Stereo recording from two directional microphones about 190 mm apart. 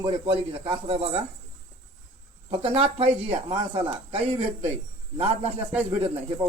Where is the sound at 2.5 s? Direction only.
30° right (ahead or behind).